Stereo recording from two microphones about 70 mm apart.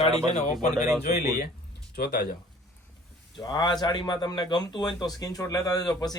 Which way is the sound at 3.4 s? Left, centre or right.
Left.